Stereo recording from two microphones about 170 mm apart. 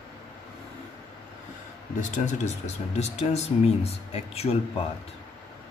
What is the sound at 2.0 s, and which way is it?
Speech, 45° left (ahead or behind).